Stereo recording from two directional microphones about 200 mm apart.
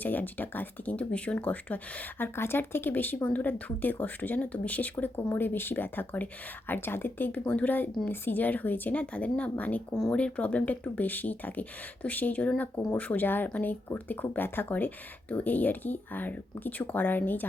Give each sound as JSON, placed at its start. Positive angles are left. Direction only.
{"t": 0.0, "sound": "speech", "side_deg": 10}